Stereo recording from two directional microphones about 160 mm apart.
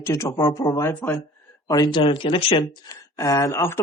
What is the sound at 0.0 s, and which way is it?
Speech, 20° left (ahead or behind).